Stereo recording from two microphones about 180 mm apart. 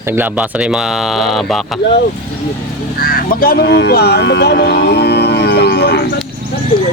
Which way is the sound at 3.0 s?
55° left (ahead or behind).